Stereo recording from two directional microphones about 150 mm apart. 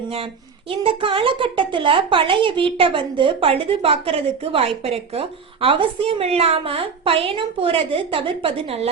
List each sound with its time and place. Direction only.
0.7 s a woman's voice: 35° right (ahead or behind)